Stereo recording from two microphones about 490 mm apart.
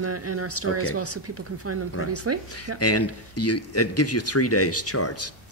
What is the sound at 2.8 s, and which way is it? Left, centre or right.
Speech, left.